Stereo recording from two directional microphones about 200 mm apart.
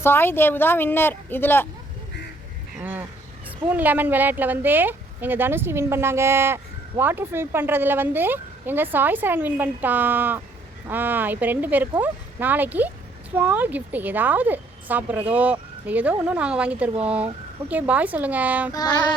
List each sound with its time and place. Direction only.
0.0 s speech: 10° left (ahead or behind)
3.4 s speech: 10° right (ahead or behind)
18.7 s child singing: 20° left (ahead or behind)